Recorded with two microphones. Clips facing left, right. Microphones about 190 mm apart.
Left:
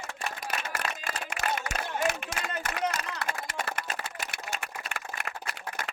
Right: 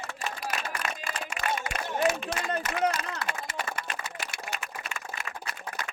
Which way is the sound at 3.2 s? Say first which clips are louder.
Even; 60° left (ahead or behind).